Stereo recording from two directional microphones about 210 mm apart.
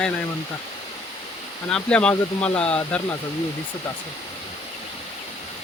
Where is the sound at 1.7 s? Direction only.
5° left (ahead or behind).